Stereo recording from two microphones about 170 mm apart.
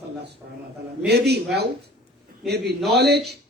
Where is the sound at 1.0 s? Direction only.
75° right (ahead or behind).